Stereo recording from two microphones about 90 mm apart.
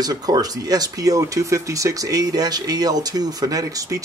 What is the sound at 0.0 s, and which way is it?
Speech, 45° right (ahead or behind).